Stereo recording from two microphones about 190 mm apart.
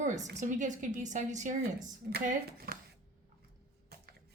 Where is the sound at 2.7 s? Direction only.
55° right (ahead or behind).